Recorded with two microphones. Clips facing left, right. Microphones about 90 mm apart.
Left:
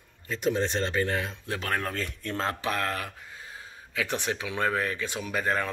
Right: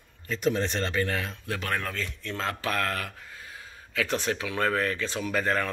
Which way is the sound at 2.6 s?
20° left (ahead or behind).